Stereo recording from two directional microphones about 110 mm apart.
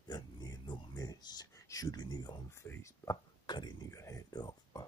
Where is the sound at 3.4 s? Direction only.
40° left (ahead or behind).